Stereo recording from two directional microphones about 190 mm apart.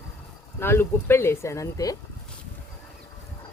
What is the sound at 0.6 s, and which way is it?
Speech, 10° left (ahead or behind).